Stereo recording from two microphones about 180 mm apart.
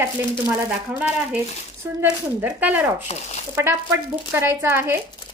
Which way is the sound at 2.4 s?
10° right (ahead or behind).